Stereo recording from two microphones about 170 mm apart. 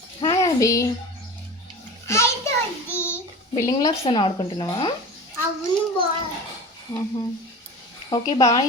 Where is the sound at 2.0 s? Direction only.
15° left (ahead or behind).